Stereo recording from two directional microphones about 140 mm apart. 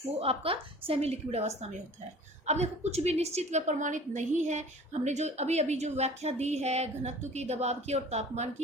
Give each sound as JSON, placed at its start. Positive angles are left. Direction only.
{"t": 0.2, "sound": "a woman's voice", "side_deg": -45}